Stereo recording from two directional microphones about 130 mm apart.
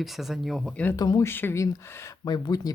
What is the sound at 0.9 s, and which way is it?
Speech, 30° left (ahead or behind).